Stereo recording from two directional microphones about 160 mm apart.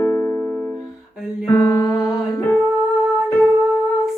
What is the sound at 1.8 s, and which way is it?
Music, 5° left (ahead or behind).